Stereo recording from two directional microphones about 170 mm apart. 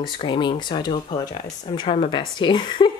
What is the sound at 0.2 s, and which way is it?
A woman's voice, 30° left (ahead or behind).